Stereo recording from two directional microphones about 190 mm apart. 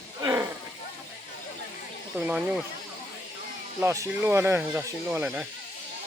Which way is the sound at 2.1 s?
10° right (ahead or behind).